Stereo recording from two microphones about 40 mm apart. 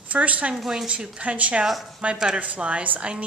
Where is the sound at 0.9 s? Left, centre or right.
Right.